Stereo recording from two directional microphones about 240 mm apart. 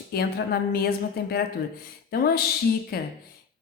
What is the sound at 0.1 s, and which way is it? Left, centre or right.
A woman's voice, left.